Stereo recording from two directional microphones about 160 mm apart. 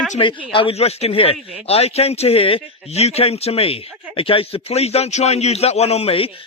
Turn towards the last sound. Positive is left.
turn(degrees=35)  # may be behind; listen again after turning